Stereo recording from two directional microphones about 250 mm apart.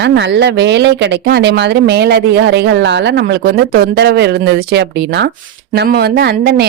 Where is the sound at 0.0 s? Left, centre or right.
Right.